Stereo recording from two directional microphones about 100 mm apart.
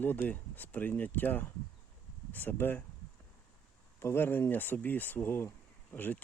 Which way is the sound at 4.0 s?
25° left (ahead or behind).